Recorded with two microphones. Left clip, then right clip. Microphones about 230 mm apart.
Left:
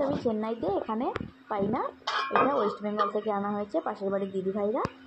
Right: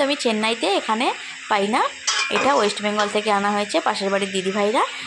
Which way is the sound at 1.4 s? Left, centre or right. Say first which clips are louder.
Right 11 dB; right.